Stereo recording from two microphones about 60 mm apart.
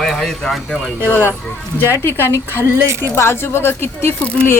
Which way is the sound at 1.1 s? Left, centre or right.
Left.